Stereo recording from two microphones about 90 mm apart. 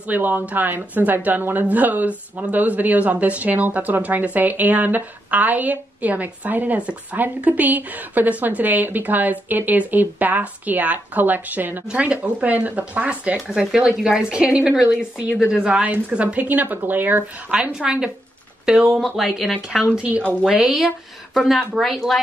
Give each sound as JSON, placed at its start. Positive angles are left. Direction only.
{"t": 0.1, "sound": "a woman's voice", "side_deg": -20}
{"t": 17.7, "sound": "speech", "side_deg": -10}
{"t": 20.0, "sound": "speech", "side_deg": -10}
{"t": 21.3, "sound": "speech", "side_deg": 5}